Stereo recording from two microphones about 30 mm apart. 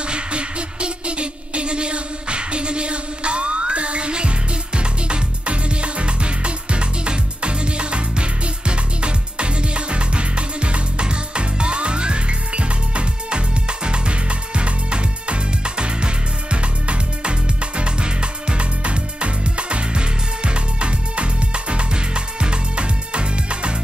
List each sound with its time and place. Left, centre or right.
0.0 s music: right